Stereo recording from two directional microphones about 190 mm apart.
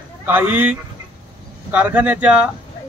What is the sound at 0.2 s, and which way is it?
Speech, 10° right (ahead or behind).